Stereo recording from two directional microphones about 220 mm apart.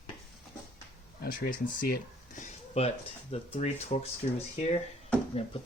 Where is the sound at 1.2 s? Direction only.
45° left (ahead or behind).